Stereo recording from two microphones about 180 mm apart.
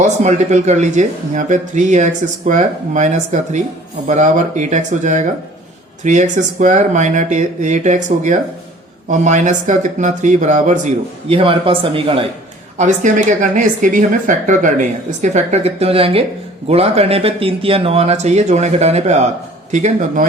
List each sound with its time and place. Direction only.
0.0 s speech: 40° right (ahead or behind)
12.7 s speech: 40° right (ahead or behind)